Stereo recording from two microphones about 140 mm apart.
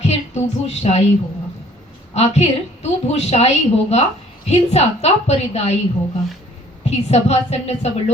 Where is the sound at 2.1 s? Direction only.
50° left (ahead or behind).